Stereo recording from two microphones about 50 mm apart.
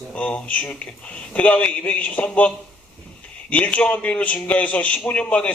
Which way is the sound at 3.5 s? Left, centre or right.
Left.